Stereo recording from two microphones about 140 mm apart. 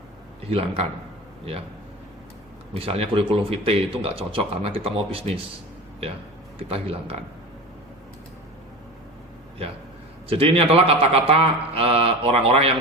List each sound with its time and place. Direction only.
0.5 s speech: 45° right (ahead or behind)
2.7 s speech: 45° right (ahead or behind)
6.6 s speech: 45° right (ahead or behind)
10.2 s speech: 40° right (ahead or behind)